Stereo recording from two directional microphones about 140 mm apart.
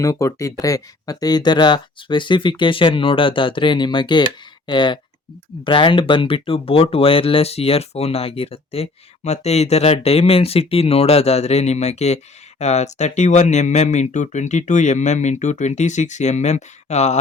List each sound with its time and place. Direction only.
0.0 s speech: 25° left (ahead or behind); by 17.2 s 55° left (ahead or behind)